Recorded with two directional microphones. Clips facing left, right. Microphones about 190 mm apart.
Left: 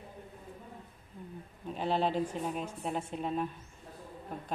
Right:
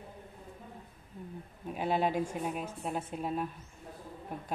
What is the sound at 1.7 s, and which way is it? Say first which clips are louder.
A woman's voice: even; 10° right (ahead or behind).